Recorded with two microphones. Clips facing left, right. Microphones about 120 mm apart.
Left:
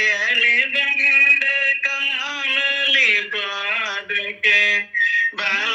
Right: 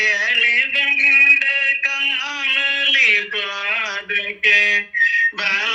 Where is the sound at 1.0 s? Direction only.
25° right (ahead or behind).